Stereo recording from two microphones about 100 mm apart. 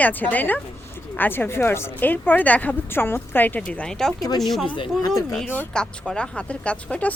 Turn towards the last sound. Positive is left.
turn(degrees=10)  # may be behind; listen again after turning